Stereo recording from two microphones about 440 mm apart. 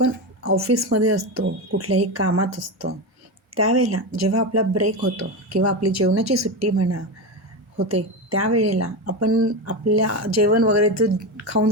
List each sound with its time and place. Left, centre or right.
0.0 s speech: right
8.3 s speech: right